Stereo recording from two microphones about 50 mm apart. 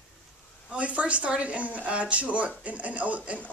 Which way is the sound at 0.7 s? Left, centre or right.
Right.